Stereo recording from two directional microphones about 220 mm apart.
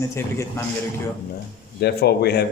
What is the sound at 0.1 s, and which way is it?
Speech, 10° left (ahead or behind).